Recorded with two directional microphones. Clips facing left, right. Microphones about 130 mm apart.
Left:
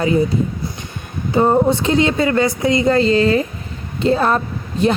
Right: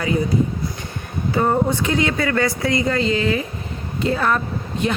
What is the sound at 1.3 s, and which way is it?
Speech, 25° left (ahead or behind).